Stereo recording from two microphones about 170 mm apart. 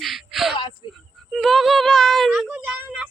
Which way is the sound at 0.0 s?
Centre (ahead or behind).